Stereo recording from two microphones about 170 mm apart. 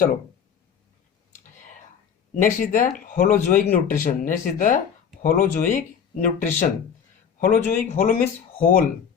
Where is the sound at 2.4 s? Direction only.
50° left (ahead or behind).